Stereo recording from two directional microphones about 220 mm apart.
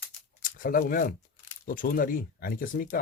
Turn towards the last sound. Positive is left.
turn(degrees=40)  # may be behind; listen again after turning